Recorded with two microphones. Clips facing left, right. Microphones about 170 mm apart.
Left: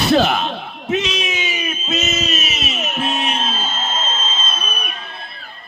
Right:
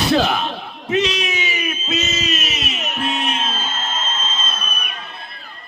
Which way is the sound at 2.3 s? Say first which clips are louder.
Left 1 dB; 5° left (ahead or behind).